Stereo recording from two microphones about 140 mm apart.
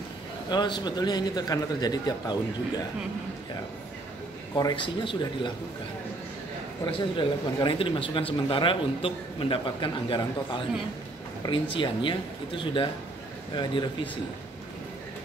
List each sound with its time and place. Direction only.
0.5 s a man's voice: 30° left (ahead or behind)
4.6 s speech: 30° left (ahead or behind)
6.9 s speech: 35° left (ahead or behind)